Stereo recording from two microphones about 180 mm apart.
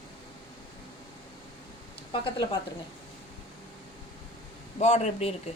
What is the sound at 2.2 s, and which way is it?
Speech, 25° left (ahead or behind).